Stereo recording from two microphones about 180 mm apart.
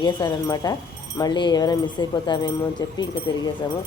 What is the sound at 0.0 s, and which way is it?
Speech, 20° left (ahead or behind).